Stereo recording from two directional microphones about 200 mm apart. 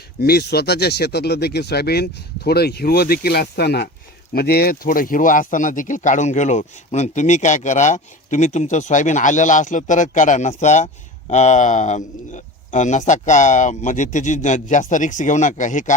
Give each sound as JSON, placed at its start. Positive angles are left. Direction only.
{"t": 0.2, "sound": "speech", "side_deg": 50}